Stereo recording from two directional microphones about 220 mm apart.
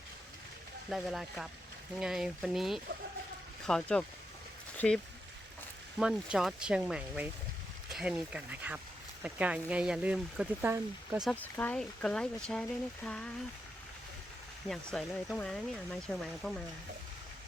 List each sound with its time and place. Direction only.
0.9 s speech: centre (ahead or behind)
6.0 s speech: 5° right (ahead or behind)
11.3 s speech: 5° left (ahead or behind)
14.7 s speech: 5° left (ahead or behind)